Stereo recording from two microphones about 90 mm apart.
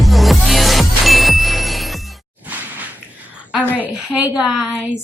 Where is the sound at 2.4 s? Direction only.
20° right (ahead or behind).